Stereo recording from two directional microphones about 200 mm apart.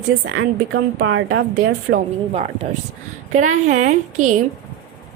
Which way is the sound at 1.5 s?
40° right (ahead or behind).